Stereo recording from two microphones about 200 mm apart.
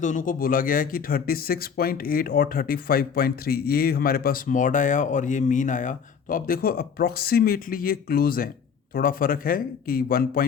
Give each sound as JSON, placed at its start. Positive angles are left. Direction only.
{"t": 0.0, "sound": "speech", "side_deg": 40}